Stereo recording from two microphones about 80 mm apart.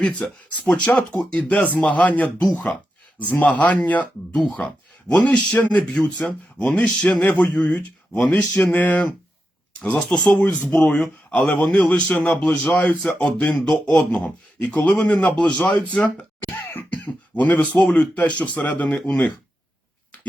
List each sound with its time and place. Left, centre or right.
0.0 s speech: centre
4.4 s speech: centre
9.9 s speech: centre
10.4 s speech: centre
11.0 s speech: centre
11.4 s speech: centre
16.4 s throat clearing: left
17.9 s speech: centre